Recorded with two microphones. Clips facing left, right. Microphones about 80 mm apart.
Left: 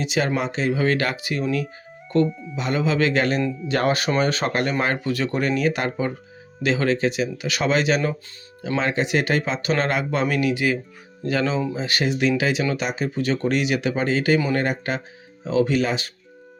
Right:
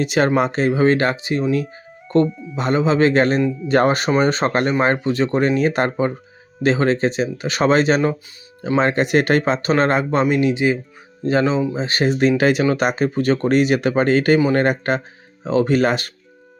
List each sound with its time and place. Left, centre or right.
0.0 s speech: right
8.8 s speech: right
10.2 s speech: right
12.4 s speech: right